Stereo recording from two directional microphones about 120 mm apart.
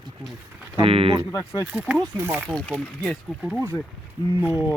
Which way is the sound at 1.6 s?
10° right (ahead or behind).